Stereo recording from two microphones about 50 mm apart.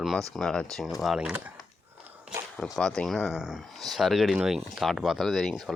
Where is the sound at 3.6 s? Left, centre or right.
Centre.